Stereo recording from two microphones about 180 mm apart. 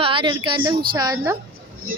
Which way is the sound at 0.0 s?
30° right (ahead or behind).